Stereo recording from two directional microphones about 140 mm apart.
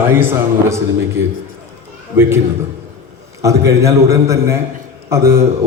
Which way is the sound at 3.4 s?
20° right (ahead or behind).